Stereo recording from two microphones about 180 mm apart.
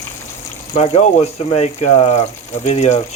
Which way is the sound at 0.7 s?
35° left (ahead or behind).